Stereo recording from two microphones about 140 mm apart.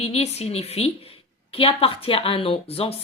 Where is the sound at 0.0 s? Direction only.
50° left (ahead or behind).